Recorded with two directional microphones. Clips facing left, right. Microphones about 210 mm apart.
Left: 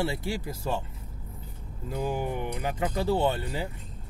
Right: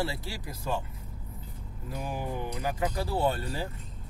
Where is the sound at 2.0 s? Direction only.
25° left (ahead or behind).